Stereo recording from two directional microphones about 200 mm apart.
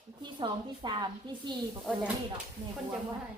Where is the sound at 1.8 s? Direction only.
5° right (ahead or behind).